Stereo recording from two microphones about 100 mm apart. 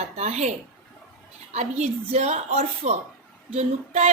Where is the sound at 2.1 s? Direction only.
90° right.